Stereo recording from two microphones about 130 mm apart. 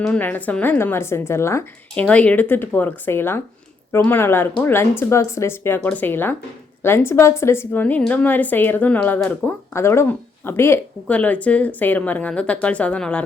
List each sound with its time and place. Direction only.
0.0 s speech: 10° left (ahead or behind)
2.0 s speech: 10° left (ahead or behind)